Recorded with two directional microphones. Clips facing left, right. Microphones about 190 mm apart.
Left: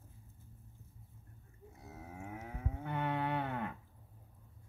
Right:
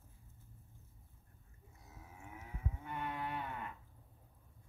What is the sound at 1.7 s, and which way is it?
Moo, 65° left (ahead or behind).